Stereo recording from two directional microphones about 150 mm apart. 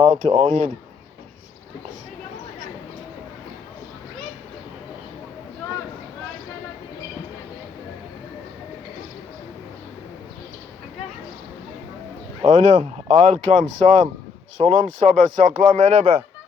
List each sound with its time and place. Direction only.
0.1 s speech: 55° right (ahead or behind)
12.5 s speech: 55° right (ahead or behind)